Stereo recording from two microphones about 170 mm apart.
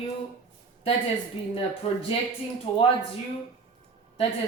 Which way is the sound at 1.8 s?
35° left (ahead or behind).